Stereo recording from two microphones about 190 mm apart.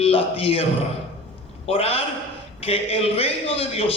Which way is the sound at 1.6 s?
30° left (ahead or behind).